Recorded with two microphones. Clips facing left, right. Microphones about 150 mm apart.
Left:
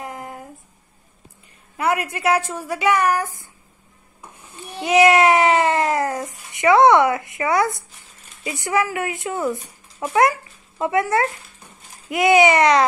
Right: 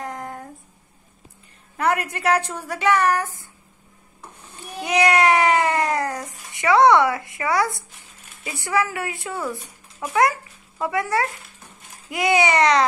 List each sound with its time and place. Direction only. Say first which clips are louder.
0.0 s a sound: right 1 dB; 5° left (ahead or behind)
1.8 s a woman's voice: left 1 dB; 10° left (ahead or behind)
4.7 s child singing: left 5 dB; 25° left (ahead or behind)
6.6 s speech: left 2 dB; 20° left (ahead or behind)
10.8 s speech: left 3 dB; 20° left (ahead or behind)